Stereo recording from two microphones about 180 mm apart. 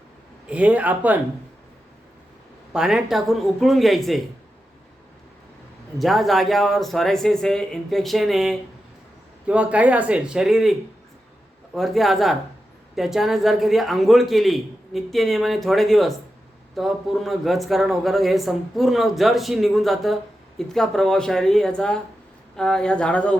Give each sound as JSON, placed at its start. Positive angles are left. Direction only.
{"t": 0.4, "sound": "speech", "side_deg": -5}
{"t": 2.7, "sound": "speech", "side_deg": -5}
{"t": 6.0, "sound": "speech", "side_deg": 0}